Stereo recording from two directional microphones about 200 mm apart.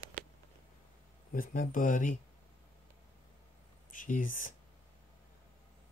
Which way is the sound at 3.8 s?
40° left (ahead or behind).